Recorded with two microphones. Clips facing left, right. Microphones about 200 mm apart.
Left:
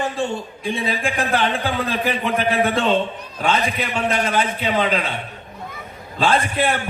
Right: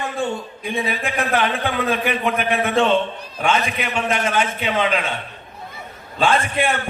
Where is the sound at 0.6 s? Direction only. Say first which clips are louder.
Left 1 dB; 30° left (ahead or behind).